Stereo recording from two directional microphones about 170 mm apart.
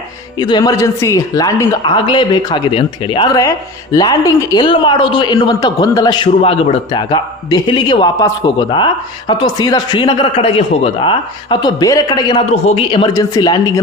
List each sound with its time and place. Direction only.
0.3 s a man's voice: 25° left (ahead or behind)